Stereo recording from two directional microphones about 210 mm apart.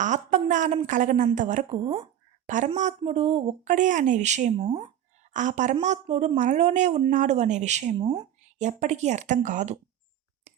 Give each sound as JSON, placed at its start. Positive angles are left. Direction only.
{"t": 0.0, "sound": "a woman's voice", "side_deg": -35}
{"t": 8.0, "sound": "a woman's voice", "side_deg": -20}
{"t": 8.5, "sound": "a woman's voice", "side_deg": -35}